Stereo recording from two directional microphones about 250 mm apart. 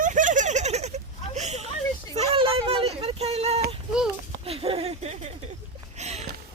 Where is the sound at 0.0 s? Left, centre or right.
Right.